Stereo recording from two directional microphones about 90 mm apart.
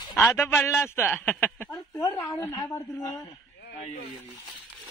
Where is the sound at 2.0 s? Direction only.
40° left (ahead or behind).